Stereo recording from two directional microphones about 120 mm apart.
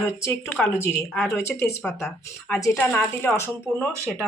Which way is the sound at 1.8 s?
5° left (ahead or behind).